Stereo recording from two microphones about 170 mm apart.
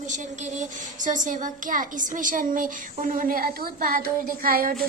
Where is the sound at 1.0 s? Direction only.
50° right (ahead or behind).